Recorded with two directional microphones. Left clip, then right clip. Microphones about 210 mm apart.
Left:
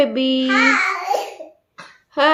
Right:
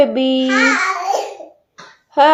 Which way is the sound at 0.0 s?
Centre (ahead or behind).